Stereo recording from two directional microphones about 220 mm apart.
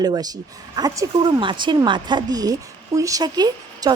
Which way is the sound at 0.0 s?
15° right (ahead or behind).